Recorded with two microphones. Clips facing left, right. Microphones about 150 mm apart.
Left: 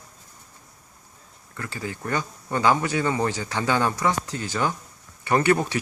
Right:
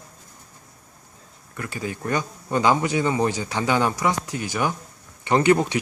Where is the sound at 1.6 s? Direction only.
15° right (ahead or behind).